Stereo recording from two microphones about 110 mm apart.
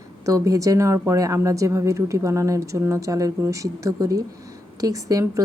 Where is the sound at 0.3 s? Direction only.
30° right (ahead or behind).